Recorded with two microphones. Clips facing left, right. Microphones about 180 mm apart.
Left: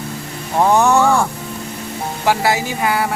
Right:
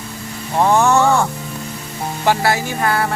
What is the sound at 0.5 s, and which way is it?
Speech, 10° left (ahead or behind).